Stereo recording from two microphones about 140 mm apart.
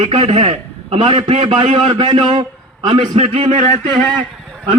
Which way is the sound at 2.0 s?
35° right (ahead or behind).